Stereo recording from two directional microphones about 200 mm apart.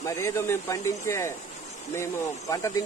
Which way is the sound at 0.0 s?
15° left (ahead or behind).